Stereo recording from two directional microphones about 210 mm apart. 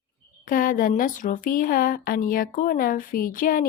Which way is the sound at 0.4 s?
40° left (ahead or behind).